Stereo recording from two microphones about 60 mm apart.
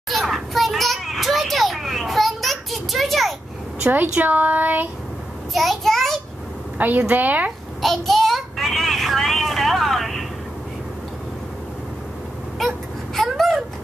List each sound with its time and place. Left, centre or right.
0.1 s children playing: centre
3.9 s a woman's voice: right
5.5 s child singing: centre
6.8 s a woman's voice: right
7.8 s a sound: centre
12.5 s a sound: centre